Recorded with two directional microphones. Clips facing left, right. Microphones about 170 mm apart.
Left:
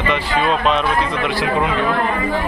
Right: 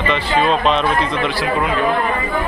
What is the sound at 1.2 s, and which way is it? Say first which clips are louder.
Speech: even; 20° left (ahead or behind).